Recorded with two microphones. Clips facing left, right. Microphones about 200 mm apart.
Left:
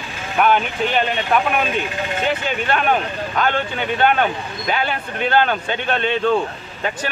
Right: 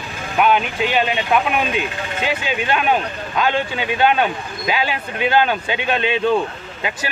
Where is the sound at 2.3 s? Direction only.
10° right (ahead or behind).